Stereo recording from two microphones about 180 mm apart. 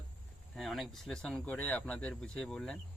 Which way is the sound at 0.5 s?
Centre (ahead or behind).